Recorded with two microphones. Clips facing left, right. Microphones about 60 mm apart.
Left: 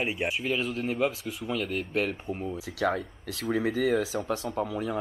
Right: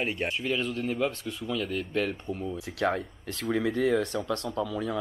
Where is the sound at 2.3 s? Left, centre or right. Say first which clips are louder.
Even; centre.